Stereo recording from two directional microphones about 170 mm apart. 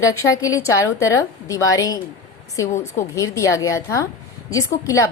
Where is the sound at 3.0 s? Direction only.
15° left (ahead or behind).